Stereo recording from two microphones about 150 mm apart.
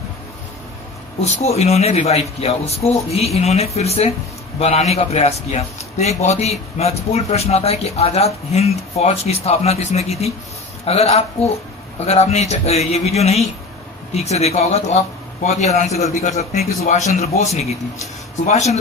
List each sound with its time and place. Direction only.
1.2 s a man's voice: 45° left (ahead or behind)